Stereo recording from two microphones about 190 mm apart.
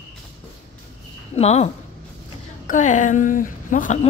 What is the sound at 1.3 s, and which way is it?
Speech, 35° left (ahead or behind).